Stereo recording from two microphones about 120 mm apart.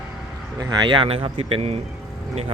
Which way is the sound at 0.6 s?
35° right (ahead or behind).